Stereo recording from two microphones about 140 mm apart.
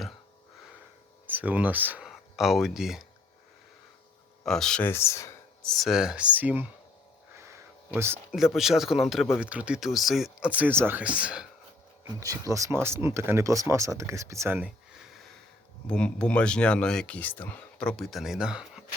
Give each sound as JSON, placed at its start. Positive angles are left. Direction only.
{"t": 1.3, "sound": "speech", "side_deg": -10}
{"t": 2.0, "sound": "speech", "side_deg": 0}
{"t": 4.4, "sound": "speech", "side_deg": 5}
{"t": 4.9, "sound": "speech", "side_deg": 20}
{"t": 5.6, "sound": "speech", "side_deg": 0}
{"t": 7.3, "sound": "a sound", "side_deg": -20}
{"t": 8.4, "sound": "speech", "side_deg": 0}
{"t": 12.2, "sound": "speech", "side_deg": -25}
{"t": 15.9, "sound": "speech", "side_deg": 5}